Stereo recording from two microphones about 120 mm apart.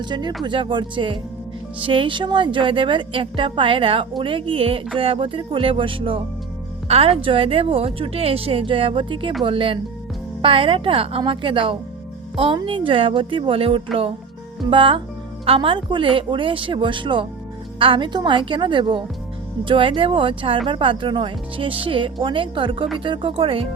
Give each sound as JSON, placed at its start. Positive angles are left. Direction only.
{"t": 0.0, "sound": "speech", "side_deg": -40}